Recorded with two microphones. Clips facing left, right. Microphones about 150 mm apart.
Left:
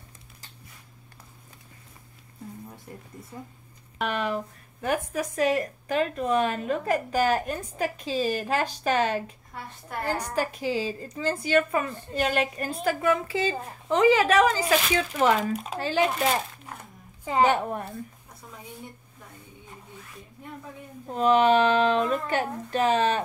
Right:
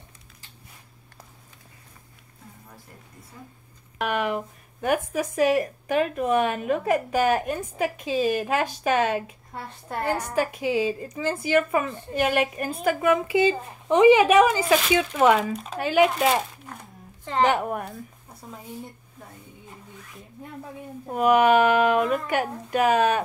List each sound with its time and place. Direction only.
4.0 s speech: 10° right (ahead or behind)
15.5 s speech: 5° left (ahead or behind)
15.8 s speech: 15° right (ahead or behind)
17.2 s a sound: 10° left (ahead or behind)
17.5 s speech: 10° right (ahead or behind)
21.1 s speech: 10° right (ahead or behind)